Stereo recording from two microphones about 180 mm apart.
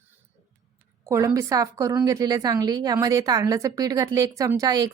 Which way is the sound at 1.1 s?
15° right (ahead or behind).